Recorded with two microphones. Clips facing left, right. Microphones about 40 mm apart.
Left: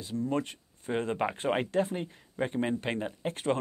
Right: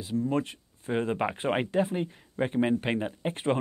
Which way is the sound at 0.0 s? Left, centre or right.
Centre.